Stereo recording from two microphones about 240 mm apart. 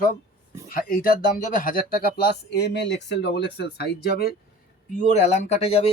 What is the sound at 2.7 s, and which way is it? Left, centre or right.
Speech, left.